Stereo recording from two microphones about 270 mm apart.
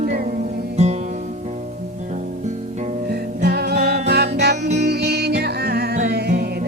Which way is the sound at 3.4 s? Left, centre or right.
Right.